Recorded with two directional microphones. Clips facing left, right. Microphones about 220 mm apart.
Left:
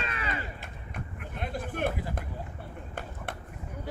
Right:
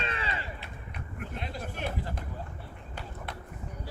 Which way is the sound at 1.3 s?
50° left (ahead or behind).